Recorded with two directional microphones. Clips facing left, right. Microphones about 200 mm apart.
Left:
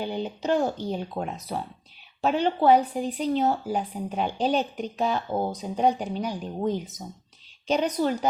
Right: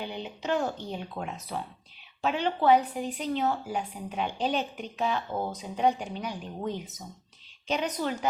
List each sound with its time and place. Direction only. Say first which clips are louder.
0.0 s speech: left 6 dB; 40° left (ahead or behind)